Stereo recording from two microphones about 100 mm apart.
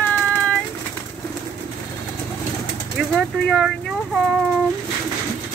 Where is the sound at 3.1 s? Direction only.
Centre (ahead or behind).